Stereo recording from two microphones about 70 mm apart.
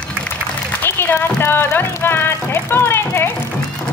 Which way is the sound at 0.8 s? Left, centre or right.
Left.